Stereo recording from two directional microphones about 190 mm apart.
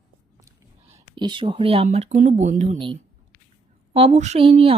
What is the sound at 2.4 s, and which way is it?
Speech, 40° right (ahead or behind).